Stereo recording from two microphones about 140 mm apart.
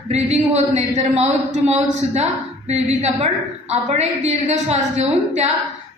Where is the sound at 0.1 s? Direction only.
50° right (ahead or behind).